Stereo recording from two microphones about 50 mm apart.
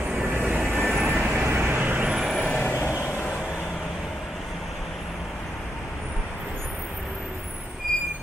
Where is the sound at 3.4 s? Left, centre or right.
Centre.